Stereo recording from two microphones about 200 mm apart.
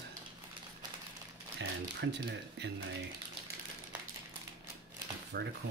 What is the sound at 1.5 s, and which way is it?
Speech, 60° right (ahead or behind).